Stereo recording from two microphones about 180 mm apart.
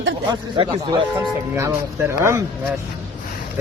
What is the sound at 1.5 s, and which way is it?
Speech, 15° right (ahead or behind).